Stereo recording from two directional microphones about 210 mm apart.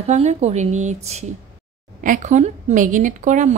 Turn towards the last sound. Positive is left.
turn(degrees=-35)  # may be behind; listen again after turning